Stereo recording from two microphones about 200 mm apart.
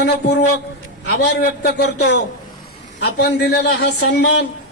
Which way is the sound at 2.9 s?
50° left (ahead or behind).